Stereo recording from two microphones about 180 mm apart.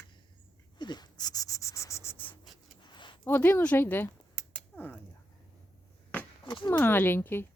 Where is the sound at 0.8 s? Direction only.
25° left (ahead or behind).